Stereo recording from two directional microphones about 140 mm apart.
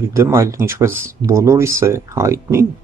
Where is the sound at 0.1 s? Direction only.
20° right (ahead or behind).